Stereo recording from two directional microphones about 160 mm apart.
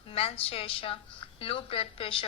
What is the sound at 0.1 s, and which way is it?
A woman's voice, 40° left (ahead or behind).